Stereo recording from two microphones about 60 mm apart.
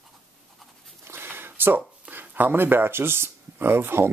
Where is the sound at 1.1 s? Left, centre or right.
Right.